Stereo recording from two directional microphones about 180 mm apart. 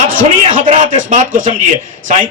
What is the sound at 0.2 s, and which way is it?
Speech, 45° right (ahead or behind).